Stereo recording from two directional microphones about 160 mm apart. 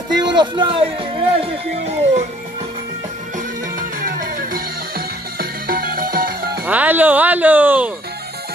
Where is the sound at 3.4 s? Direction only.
55° right (ahead or behind).